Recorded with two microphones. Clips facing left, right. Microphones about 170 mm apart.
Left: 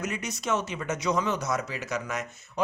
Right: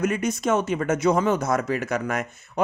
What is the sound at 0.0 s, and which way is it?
Speech, 55° right (ahead or behind).